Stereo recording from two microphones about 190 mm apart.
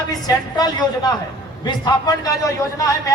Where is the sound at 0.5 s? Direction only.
20° left (ahead or behind).